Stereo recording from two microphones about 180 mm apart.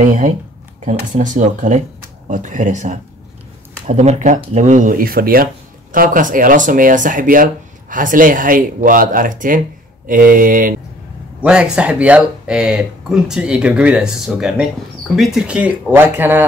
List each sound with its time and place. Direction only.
0.0 s speech: 45° right (ahead or behind)
11.4 s speech: 5° right (ahead or behind)